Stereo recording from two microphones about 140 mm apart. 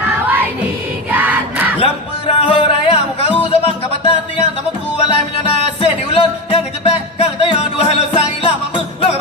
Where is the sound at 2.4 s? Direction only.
40° left (ahead or behind).